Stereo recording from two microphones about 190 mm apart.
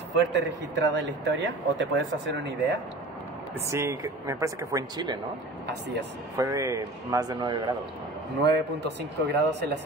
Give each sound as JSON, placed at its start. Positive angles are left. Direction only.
{"t": 0.1, "sound": "speech", "side_deg": -70}
{"t": 3.6, "sound": "speech", "side_deg": -15}
{"t": 6.3, "sound": "a man's voice", "side_deg": -15}
{"t": 8.4, "sound": "speech", "side_deg": -60}